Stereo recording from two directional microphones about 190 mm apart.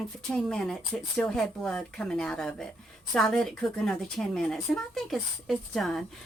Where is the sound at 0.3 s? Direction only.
5° left (ahead or behind).